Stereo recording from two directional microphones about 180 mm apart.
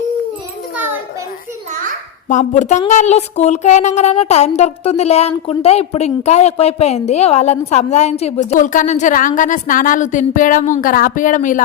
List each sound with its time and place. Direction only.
2.3 s speech: 45° left (ahead or behind)